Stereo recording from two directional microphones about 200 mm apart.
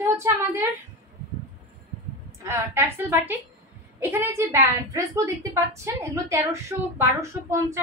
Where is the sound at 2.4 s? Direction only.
15° right (ahead or behind).